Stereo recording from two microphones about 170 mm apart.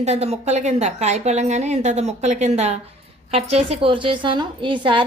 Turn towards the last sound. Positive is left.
turn(degrees=-30)  # may be behind; listen again after turning